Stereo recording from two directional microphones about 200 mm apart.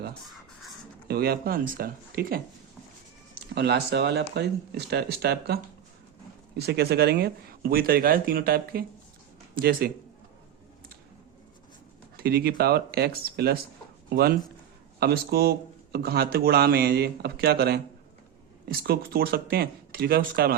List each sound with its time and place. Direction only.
1.0 s speech: 50° right (ahead or behind)
6.6 s speech: 55° right (ahead or behind)
12.1 s speech: 50° right (ahead or behind)
18.8 s speech: 50° right (ahead or behind)